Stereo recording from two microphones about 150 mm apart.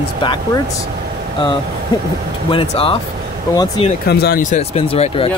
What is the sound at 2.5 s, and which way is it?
Speech, 35° left (ahead or behind).